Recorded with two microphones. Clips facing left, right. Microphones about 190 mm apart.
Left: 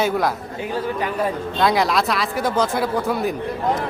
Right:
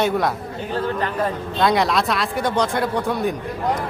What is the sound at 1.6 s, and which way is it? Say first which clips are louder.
A man's voice: even; centre (ahead or behind).